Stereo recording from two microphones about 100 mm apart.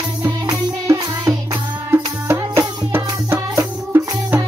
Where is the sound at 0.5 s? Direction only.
40° right (ahead or behind).